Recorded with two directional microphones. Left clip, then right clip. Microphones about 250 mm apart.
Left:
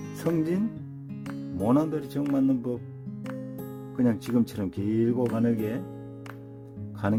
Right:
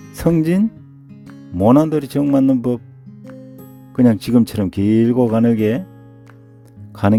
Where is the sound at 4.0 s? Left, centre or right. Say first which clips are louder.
Right 11 dB; right.